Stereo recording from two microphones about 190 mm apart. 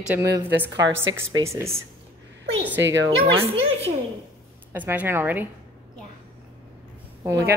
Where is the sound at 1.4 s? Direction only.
15° right (ahead or behind).